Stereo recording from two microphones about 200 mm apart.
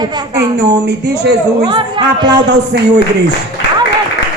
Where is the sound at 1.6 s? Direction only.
25° right (ahead or behind).